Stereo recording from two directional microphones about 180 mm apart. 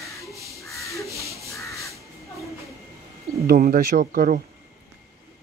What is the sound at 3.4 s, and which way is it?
Speech, 50° right (ahead or behind).